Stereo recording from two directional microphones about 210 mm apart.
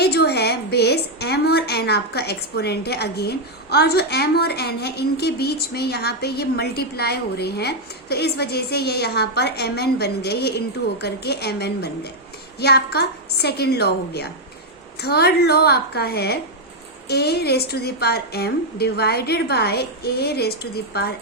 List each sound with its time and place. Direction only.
0.0 s a woman's voice: 50° left (ahead or behind)